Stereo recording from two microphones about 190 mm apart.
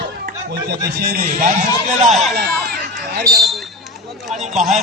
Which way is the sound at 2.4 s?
55° right (ahead or behind).